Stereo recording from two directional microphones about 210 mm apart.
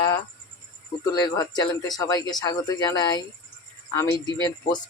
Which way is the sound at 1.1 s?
15° left (ahead or behind).